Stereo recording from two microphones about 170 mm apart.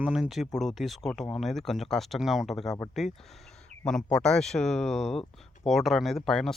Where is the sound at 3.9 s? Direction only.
5° left (ahead or behind).